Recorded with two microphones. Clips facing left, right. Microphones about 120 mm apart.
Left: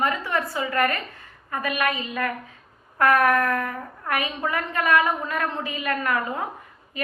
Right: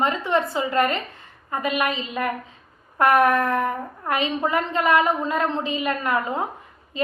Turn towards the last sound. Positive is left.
turn(degrees=-25)  # may be behind; listen again after turning